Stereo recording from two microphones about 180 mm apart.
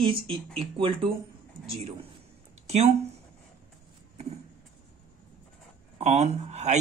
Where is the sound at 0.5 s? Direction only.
30° right (ahead or behind).